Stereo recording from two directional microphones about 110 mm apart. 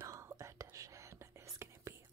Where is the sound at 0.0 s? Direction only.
25° right (ahead or behind).